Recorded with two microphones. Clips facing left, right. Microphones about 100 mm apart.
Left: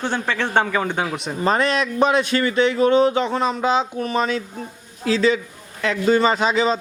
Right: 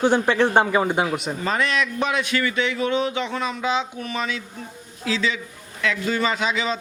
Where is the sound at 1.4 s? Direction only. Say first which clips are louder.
Left 6 dB; 35° left (ahead or behind).